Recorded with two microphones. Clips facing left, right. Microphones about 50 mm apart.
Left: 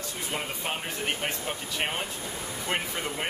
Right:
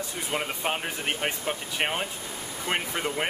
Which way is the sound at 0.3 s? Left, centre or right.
Centre.